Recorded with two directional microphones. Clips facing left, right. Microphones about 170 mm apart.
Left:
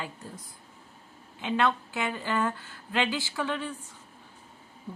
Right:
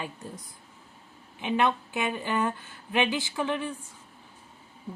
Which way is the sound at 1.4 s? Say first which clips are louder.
Right 1 dB; 15° right (ahead or behind).